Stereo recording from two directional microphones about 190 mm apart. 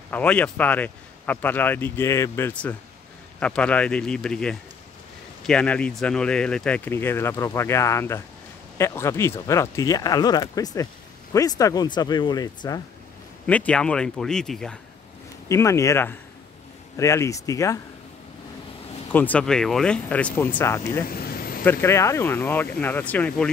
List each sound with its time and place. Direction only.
0.1 s speech: 5° left (ahead or behind)
13.5 s speech: 5° left (ahead or behind)
15.4 s speech: 15° left (ahead or behind)
19.1 s speech: 5° left (ahead or behind)
21.1 s a sound: 50° left (ahead or behind)
21.6 s speech: 15° left (ahead or behind)